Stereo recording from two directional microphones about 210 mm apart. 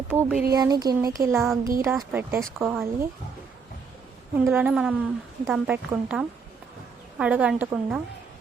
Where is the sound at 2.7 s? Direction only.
10° right (ahead or behind).